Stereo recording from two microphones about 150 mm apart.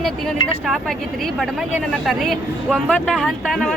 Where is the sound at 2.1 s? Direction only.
Centre (ahead or behind).